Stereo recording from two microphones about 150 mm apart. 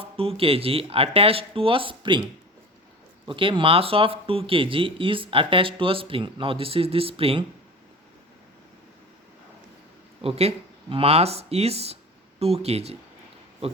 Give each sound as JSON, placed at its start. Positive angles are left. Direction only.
{"t": 0.0, "sound": "speech", "side_deg": -40}
{"t": 3.2, "sound": "speech", "side_deg": -35}
{"t": 10.2, "sound": "speech", "side_deg": -40}